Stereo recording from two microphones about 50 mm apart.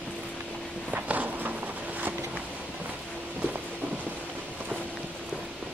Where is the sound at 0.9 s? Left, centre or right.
Right.